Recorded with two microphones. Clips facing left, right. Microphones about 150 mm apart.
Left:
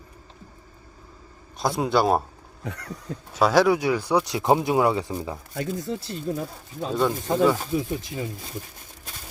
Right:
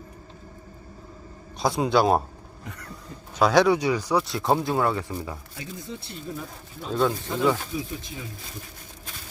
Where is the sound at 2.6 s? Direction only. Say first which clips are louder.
Left 7 dB; 80° left.